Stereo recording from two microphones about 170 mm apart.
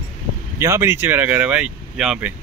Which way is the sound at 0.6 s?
15° right (ahead or behind).